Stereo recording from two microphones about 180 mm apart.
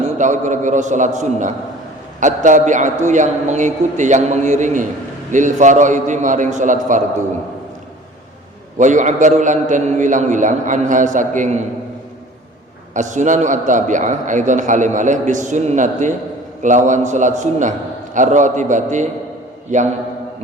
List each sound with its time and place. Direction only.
0.0 s a man's voice: 45° right (ahead or behind)
8.8 s a man's voice: 45° right (ahead or behind)
12.9 s a man's voice: 45° right (ahead or behind)